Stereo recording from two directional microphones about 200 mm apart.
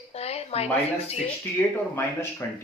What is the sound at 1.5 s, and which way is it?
Speech, 10° left (ahead or behind).